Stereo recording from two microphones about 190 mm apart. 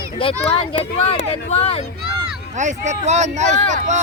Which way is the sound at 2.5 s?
40° right (ahead or behind).